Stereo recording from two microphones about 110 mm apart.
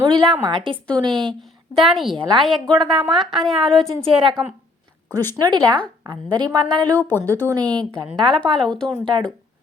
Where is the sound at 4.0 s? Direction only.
55° right (ahead or behind).